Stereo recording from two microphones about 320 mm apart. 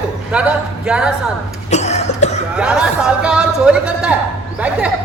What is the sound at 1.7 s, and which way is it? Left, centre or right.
Cough, left.